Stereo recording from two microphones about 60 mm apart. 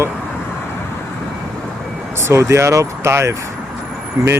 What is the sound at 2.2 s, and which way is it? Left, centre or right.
Speech, right.